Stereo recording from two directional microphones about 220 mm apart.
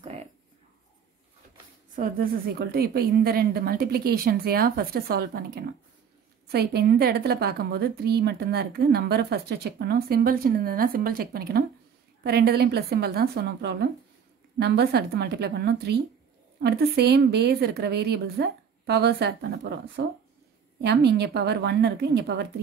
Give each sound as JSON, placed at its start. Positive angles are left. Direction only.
{"t": 2.7, "sound": "a woman's voice", "side_deg": -45}